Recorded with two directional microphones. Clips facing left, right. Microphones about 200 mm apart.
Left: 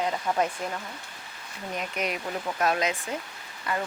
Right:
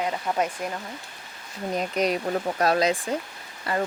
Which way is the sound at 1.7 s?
35° right (ahead or behind).